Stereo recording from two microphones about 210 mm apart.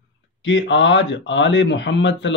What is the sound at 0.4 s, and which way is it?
Speech, 60° left (ahead or behind).